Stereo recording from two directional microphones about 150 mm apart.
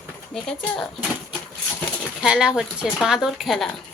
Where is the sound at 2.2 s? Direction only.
5° right (ahead or behind).